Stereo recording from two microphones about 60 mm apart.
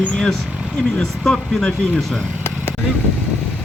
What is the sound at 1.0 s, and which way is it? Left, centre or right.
Speech, centre.